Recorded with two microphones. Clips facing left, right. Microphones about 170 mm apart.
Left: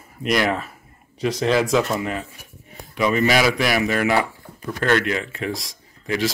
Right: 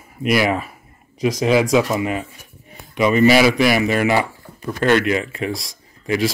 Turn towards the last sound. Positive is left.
turn(degrees=-5)  # may be behind; listen again after turning